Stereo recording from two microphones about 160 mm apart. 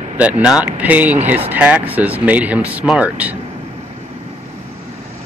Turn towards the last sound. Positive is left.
turn(degrees=-10)  # may be behind; listen again after turning